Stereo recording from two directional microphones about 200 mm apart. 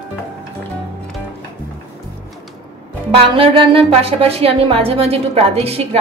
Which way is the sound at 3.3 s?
25° right (ahead or behind).